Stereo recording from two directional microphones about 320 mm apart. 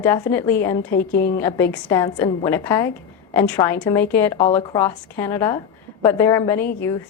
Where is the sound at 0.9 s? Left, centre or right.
Left.